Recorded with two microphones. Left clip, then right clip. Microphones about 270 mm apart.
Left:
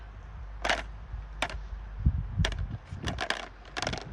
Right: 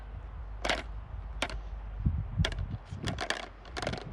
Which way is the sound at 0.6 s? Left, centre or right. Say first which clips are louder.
Left 3 dB; centre.